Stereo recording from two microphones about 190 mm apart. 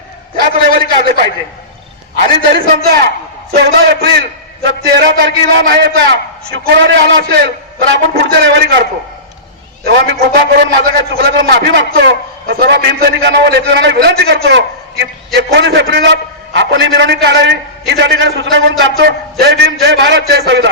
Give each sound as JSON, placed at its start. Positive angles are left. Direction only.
{"t": 2.5, "sound": "a man's voice", "side_deg": -55}